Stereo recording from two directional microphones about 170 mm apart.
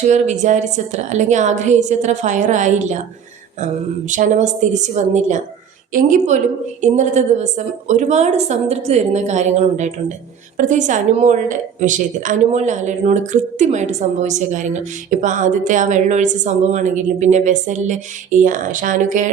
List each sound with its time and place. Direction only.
0.1 s a woman's voice: 45° right (ahead or behind)
4.1 s a woman's voice: 45° right (ahead or behind)